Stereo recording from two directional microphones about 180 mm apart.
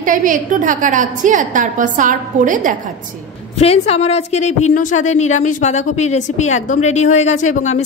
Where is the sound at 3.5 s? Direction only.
35° left (ahead or behind).